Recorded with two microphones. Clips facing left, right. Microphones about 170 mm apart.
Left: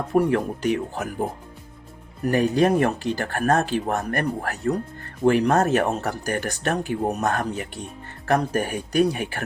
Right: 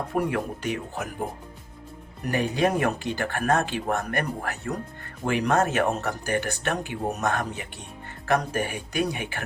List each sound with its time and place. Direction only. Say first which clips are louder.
0.1 s speech: left 8 dB; 40° left (ahead or behind)
2.3 s speech: left 5 dB; 40° left (ahead or behind)